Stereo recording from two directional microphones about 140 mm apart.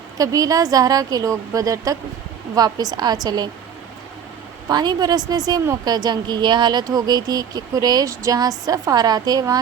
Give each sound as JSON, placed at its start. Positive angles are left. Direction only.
{"t": 0.2, "sound": "a woman's voice", "side_deg": -25}
{"t": 4.7, "sound": "a woman's voice", "side_deg": -30}